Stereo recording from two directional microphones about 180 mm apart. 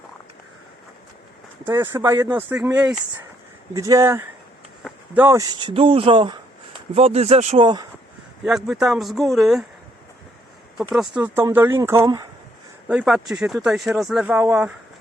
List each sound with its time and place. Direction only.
1.6 s speech: 15° right (ahead or behind)
3.8 s speech: 20° right (ahead or behind)
8.4 s speech: centre (ahead or behind)
10.9 s speech: centre (ahead or behind)
11.2 s speech: 10° right (ahead or behind)
12.9 s speech: 5° right (ahead or behind)
14.3 s speech: 10° right (ahead or behind)